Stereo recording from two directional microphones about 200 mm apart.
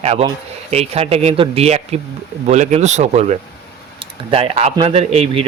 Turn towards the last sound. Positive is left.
turn(degrees=-30)  # may be behind; listen again after turning